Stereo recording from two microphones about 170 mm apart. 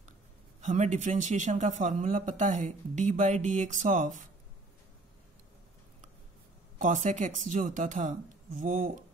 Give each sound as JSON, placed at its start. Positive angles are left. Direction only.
{"t": 0.6, "sound": "speech", "side_deg": -45}
{"t": 6.8, "sound": "speech", "side_deg": -45}